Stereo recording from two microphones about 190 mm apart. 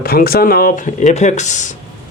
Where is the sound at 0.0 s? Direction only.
50° left (ahead or behind).